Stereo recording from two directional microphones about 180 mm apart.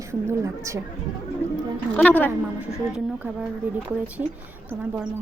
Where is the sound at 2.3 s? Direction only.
5° right (ahead or behind).